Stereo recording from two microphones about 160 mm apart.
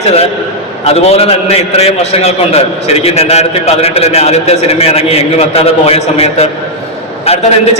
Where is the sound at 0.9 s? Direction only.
40° left (ahead or behind).